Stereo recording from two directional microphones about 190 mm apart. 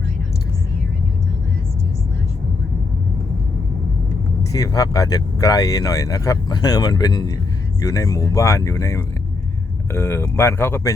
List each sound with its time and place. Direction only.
4.5 s speech: 20° left (ahead or behind)